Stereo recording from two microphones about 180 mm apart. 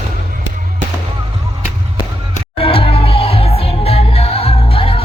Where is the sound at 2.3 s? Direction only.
30° left (ahead or behind).